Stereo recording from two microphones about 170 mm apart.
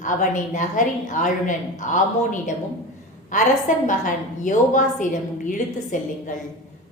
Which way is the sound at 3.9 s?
50° left (ahead or behind).